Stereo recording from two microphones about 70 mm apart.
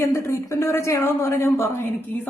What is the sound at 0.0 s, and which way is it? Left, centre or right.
A woman's voice, left.